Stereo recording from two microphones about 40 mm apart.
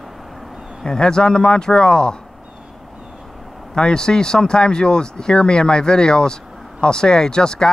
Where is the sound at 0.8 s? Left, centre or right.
Centre.